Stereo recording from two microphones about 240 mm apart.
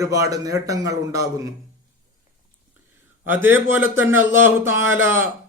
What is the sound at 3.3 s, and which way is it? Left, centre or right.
Speech, centre.